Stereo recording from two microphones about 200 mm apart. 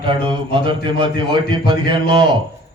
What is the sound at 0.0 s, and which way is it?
A man's voice, 25° right (ahead or behind).